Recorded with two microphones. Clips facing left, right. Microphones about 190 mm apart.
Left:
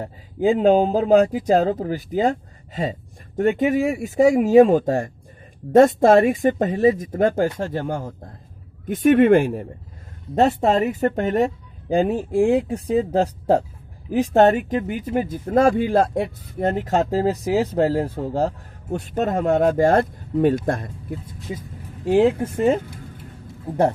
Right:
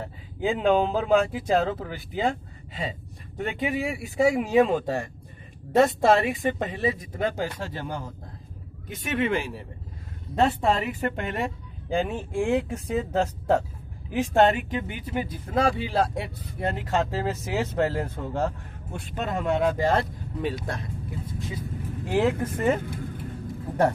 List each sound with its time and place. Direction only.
0.0 s speech: 40° left (ahead or behind)
22.0 s speech: 30° left (ahead or behind)